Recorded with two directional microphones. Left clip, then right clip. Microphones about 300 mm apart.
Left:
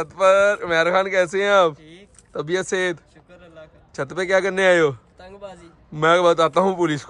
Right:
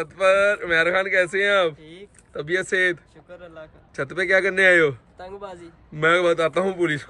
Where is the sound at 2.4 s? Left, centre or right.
Centre.